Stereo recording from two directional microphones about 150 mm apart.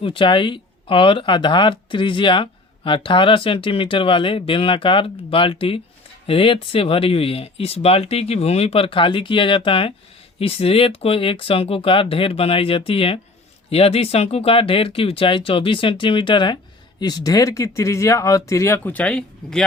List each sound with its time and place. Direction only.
0.0 s speech: 35° left (ahead or behind); by 19.6 s 5° left (ahead or behind)